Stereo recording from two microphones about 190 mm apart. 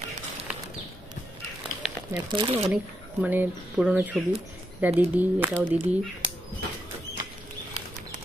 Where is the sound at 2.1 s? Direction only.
25° right (ahead or behind).